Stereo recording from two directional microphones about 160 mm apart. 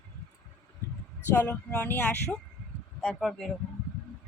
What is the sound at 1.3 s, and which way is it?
Speech, 10° left (ahead or behind).